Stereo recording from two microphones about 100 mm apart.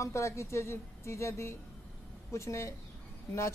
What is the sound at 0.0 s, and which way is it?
Speech, 30° left (ahead or behind).